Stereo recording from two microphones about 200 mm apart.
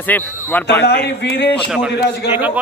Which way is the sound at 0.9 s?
55° left (ahead or behind).